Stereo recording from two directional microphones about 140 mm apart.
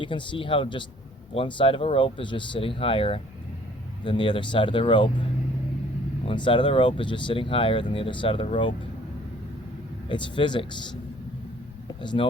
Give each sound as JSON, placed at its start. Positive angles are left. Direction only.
{"t": 0.0, "sound": "speech", "side_deg": 35}
{"t": 6.2, "sound": "speech", "side_deg": 35}
{"t": 10.1, "sound": "speech", "side_deg": 35}